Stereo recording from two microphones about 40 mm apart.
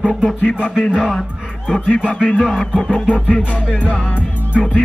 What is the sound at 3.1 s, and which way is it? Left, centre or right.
Music, left.